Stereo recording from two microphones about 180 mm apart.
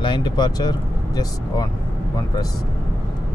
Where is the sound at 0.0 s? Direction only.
25° left (ahead or behind).